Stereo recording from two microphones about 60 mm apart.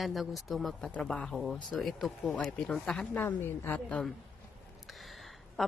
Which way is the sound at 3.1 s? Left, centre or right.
Left.